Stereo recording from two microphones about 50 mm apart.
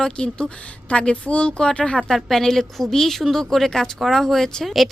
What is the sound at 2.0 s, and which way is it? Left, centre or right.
Speech, centre.